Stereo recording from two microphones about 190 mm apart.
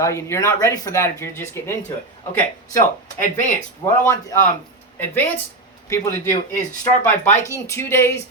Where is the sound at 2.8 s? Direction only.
40° left (ahead or behind).